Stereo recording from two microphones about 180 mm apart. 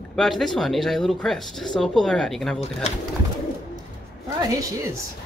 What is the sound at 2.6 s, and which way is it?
Speech, 40° left (ahead or behind).